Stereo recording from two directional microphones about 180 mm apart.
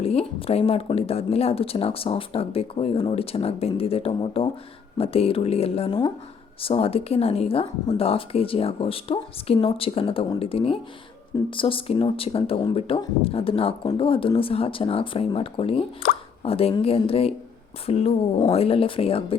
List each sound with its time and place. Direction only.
0.0 s speech: 35° left (ahead or behind)